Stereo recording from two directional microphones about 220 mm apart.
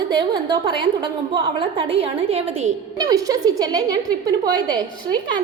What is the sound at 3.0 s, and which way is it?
A woman's voice, 15° right (ahead or behind).